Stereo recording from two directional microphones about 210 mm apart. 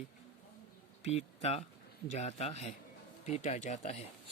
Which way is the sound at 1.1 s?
30° left (ahead or behind).